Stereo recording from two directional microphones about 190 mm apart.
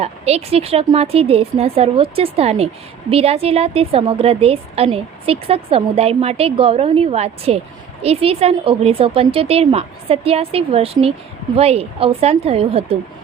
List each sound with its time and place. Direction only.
0.0 s a woman's voice: 35° right (ahead or behind)